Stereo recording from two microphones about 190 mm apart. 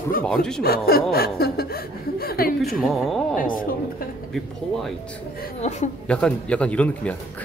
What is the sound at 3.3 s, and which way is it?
Speech, 45° left (ahead or behind).